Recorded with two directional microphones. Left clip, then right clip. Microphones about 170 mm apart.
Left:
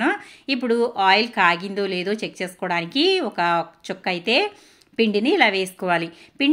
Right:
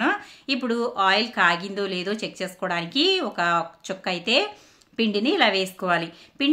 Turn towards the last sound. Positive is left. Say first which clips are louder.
# left 3 dB
turn(degrees=15)  # may be behind; listen again after turning